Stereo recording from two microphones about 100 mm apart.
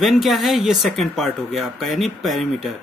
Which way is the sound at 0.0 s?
Centre (ahead or behind).